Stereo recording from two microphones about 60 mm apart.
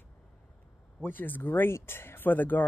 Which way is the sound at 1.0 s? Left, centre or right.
Left.